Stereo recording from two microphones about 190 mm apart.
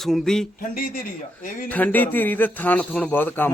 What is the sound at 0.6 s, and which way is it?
Speech, 45° left (ahead or behind).